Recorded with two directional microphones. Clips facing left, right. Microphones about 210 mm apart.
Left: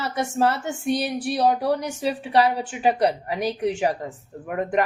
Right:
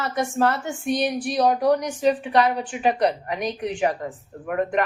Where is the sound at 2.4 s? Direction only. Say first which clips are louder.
Even; 30° left (ahead or behind).